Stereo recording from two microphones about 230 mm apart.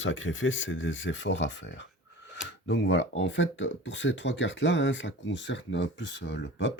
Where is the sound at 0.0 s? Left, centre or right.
Left.